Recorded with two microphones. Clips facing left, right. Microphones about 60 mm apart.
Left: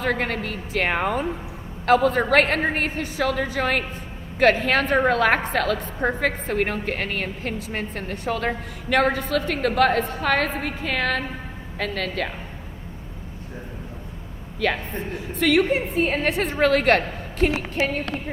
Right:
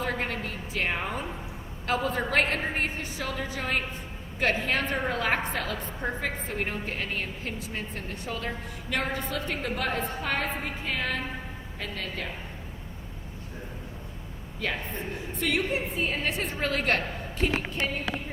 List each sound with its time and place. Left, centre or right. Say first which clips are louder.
0.0 s a woman's voice: left 6 dB; left
14.6 s a woman's voice: left 7 dB; left
17.8 s a woman's voice: left 5 dB; left